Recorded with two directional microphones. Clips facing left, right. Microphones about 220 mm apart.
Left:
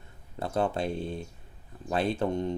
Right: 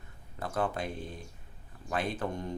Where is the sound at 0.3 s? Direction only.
25° left (ahead or behind).